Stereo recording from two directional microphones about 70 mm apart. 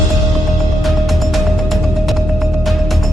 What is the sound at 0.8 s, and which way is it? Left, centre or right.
Music, centre.